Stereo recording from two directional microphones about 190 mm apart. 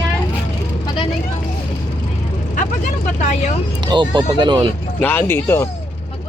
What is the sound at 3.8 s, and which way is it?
Speech, 25° right (ahead or behind).